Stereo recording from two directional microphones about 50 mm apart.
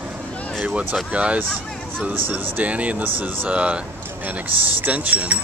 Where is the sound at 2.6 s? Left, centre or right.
Right.